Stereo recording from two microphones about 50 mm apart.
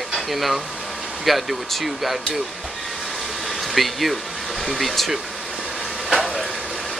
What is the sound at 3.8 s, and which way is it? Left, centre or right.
Speech, centre.